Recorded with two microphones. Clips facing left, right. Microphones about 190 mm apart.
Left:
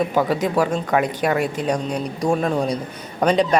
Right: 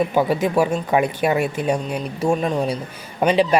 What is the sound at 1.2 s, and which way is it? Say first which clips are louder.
Speech: right 1 dB; 25° right (ahead or behind).